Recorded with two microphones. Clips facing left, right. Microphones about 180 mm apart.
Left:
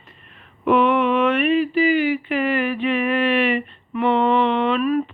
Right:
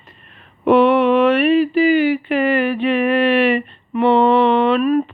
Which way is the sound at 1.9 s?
65° right (ahead or behind).